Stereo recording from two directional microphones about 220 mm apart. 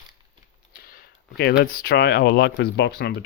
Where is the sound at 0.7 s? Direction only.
45° left (ahead or behind).